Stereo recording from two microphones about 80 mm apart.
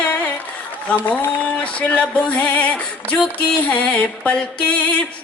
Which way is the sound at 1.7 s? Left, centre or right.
Centre.